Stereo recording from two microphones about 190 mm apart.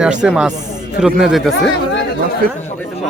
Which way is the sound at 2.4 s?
50° right (ahead or behind).